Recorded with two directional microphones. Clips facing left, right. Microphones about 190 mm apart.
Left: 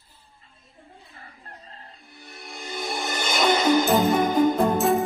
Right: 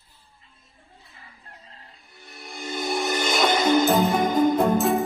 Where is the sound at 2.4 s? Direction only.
Centre (ahead or behind).